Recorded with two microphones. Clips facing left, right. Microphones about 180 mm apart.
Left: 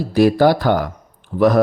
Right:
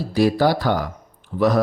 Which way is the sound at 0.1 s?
55° left (ahead or behind).